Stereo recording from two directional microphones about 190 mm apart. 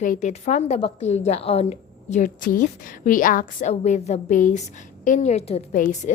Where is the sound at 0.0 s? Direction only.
40° left (ahead or behind).